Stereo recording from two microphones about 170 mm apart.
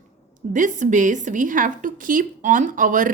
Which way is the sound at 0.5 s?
50° right (ahead or behind).